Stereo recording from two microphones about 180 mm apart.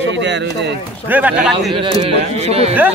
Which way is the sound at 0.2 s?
75° right (ahead or behind).